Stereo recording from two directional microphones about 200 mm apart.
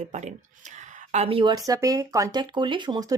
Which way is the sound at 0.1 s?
35° right (ahead or behind).